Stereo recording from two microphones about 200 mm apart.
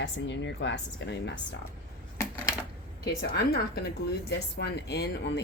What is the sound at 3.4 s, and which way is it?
A woman's voice, 50° left (ahead or behind).